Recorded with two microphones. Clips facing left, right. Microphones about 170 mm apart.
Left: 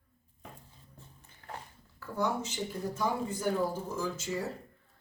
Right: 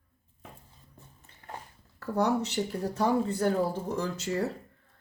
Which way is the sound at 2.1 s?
70° right (ahead or behind).